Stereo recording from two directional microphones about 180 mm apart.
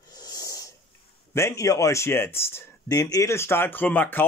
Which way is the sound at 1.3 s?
15° left (ahead or behind).